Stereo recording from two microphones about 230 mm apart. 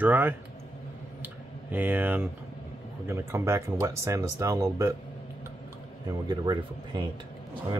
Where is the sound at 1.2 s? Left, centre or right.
Centre.